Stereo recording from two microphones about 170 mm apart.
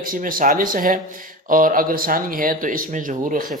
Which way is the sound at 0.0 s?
55° right (ahead or behind).